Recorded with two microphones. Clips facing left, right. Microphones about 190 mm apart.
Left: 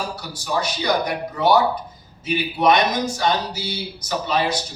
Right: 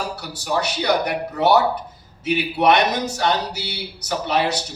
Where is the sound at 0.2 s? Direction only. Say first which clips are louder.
Right 1 dB; 65° right (ahead or behind).